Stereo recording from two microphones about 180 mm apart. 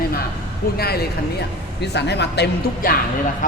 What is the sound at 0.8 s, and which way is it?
A woman's voice, 60° left (ahead or behind).